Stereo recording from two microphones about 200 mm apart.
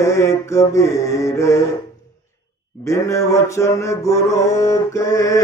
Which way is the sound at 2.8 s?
15° left (ahead or behind).